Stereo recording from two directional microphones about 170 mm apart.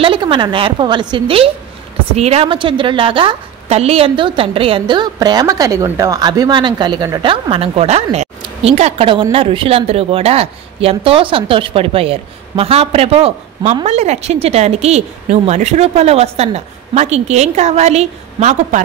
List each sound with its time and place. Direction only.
0.0 s a woman's voice: 30° right (ahead or behind)